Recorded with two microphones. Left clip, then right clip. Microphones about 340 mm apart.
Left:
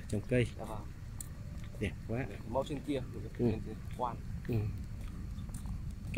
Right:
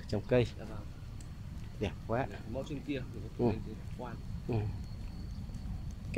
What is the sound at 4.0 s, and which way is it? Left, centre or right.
Speech, left.